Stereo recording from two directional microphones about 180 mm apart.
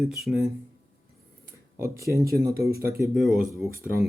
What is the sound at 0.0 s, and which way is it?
Speech, centre (ahead or behind).